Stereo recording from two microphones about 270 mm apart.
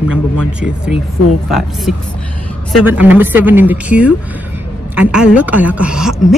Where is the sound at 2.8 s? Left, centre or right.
Centre.